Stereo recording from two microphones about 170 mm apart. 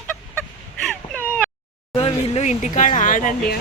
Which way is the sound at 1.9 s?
35° left (ahead or behind).